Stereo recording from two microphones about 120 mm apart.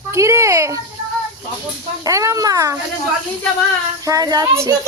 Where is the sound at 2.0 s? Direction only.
25° right (ahead or behind).